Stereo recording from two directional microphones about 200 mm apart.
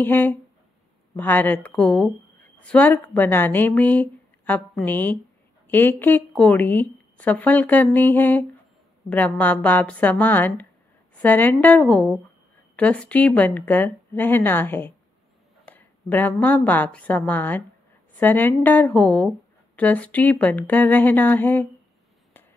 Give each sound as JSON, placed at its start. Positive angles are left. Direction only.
{"t": 0.0, "sound": "a woman's voice", "side_deg": 10}